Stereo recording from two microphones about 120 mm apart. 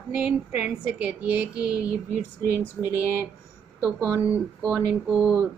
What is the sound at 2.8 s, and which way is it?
Speech, 10° left (ahead or behind).